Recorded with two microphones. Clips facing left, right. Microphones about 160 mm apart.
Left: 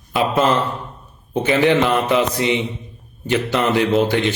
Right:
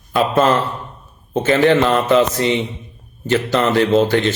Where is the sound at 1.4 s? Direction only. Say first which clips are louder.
Right 2 dB; 15° left (ahead or behind).